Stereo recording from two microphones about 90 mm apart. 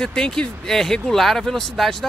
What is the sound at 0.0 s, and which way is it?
Speech, 10° left (ahead or behind).